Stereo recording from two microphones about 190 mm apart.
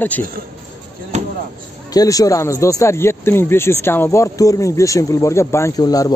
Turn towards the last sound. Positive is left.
turn(degrees=20)  # may be behind; listen again after turning